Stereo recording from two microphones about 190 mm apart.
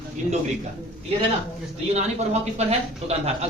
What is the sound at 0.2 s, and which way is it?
Speech, 40° right (ahead or behind).